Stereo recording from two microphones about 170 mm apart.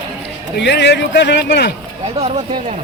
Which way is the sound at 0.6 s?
85° left.